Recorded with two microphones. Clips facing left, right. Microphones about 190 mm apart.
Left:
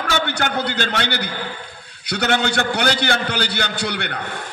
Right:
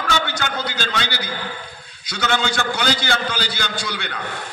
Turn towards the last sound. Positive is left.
turn(degrees=65)  # may be behind; listen again after turning